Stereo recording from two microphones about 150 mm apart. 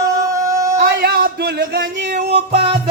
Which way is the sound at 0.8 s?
90° right.